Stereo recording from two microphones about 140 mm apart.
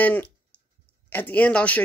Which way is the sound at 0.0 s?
15° left (ahead or behind).